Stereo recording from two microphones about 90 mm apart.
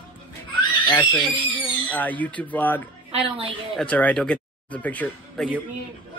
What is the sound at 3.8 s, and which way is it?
Speech, 15° left (ahead or behind).